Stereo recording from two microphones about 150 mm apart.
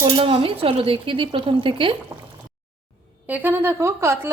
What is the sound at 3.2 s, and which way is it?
A woman's voice, 10° right (ahead or behind).